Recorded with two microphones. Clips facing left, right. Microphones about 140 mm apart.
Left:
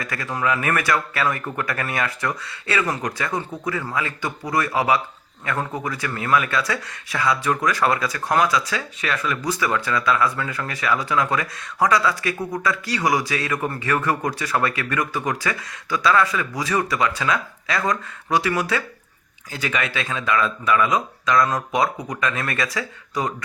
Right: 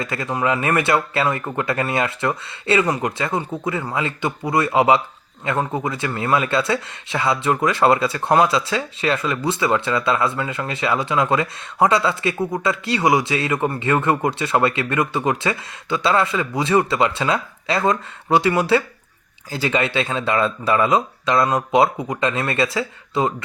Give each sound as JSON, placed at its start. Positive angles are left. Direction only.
{"t": 0.0, "sound": "speech", "side_deg": -25}